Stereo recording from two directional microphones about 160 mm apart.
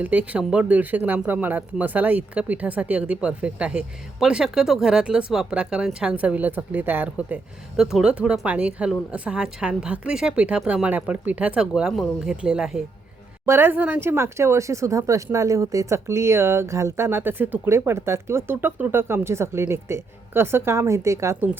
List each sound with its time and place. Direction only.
0.0 s speech: 10° right (ahead or behind)
13.4 s speech: 15° right (ahead or behind)